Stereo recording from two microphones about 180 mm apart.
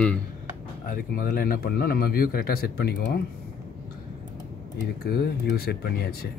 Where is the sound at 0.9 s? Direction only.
50° left (ahead or behind).